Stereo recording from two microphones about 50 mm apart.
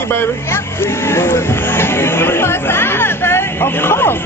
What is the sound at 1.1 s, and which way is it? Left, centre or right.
Speech, left.